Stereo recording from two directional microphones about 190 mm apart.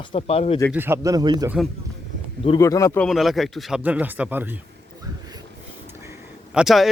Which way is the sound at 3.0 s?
Centre (ahead or behind).